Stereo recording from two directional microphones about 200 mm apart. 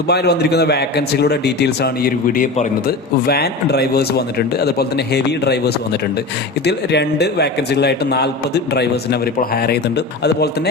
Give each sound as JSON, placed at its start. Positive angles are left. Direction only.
{"t": 0.1, "sound": "a man's voice", "side_deg": 55}